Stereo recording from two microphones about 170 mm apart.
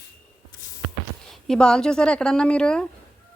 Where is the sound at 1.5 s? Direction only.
5° left (ahead or behind).